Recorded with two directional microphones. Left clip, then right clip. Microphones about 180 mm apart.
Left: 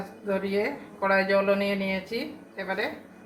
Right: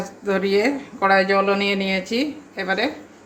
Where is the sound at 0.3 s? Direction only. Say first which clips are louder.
Right 8 dB; 45° right (ahead or behind).